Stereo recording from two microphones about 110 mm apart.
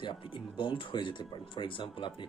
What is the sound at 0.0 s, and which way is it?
Speech, 50° left (ahead or behind).